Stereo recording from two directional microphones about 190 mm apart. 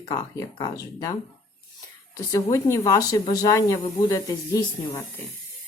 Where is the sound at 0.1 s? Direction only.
20° left (ahead or behind).